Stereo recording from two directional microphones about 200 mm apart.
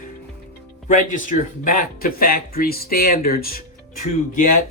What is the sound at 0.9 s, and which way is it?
Speech, 40° left (ahead or behind).